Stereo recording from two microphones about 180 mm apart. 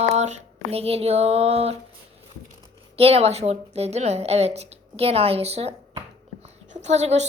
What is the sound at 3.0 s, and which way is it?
Speech, 35° right (ahead or behind).